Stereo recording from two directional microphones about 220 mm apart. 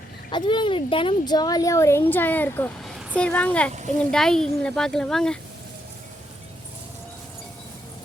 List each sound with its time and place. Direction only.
0.3 s speech: 20° left (ahead or behind); by 3.7 s 5° left (ahead or behind)
3.7 s speech: 35° right (ahead or behind)
4.1 s speech: 5° left (ahead or behind)